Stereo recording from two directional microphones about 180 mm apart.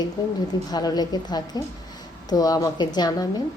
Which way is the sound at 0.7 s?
20° left (ahead or behind).